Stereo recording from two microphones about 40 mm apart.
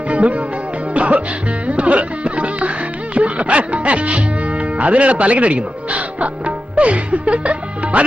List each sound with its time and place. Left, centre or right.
0.1 s music: right
3.2 s speech: right